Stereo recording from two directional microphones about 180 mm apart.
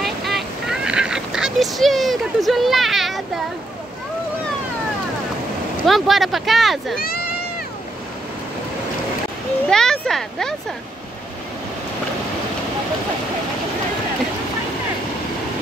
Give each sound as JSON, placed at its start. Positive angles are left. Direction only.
{"t": 0.0, "sound": "honk", "side_deg": 0}
{"t": 5.9, "sound": "speech", "side_deg": 0}
{"t": 7.0, "sound": "speech", "side_deg": 55}
{"t": 9.7, "sound": "speech", "side_deg": 5}